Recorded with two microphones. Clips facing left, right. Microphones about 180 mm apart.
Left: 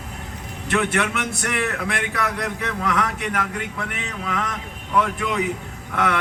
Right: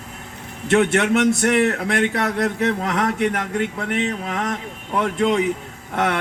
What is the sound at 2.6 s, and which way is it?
Speech, 40° right (ahead or behind).